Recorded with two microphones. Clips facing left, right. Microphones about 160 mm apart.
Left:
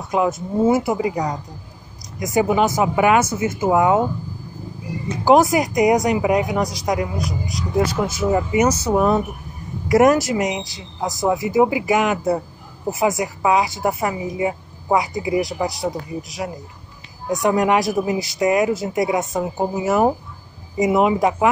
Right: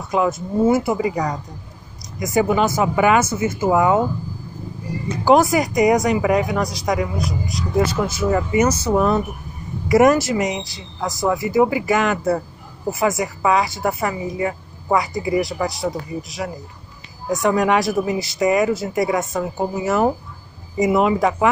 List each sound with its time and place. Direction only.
0.1 s speech: 10° left (ahead or behind)
5.2 s speech: 15° left (ahead or behind)
6.6 s speech: 20° left (ahead or behind)
10.6 s speech: 20° left (ahead or behind)